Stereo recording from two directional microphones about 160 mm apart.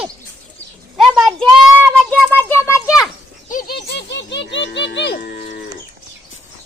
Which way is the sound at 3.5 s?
85° left.